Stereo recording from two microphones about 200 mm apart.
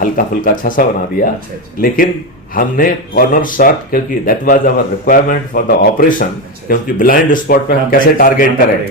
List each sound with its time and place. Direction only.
0.0 s speech: 45° left (ahead or behind)
2.6 s speech: 45° left (ahead or behind)